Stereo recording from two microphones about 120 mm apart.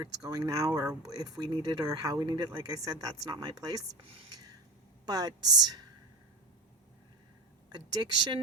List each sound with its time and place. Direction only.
0.0 s speech: 35° right (ahead or behind)
4.0 s speech: 50° right (ahead or behind)
4.3 s filing: 30° right (ahead or behind)
5.0 s speech: 30° right (ahead or behind)
7.7 s speech: 35° right (ahead or behind)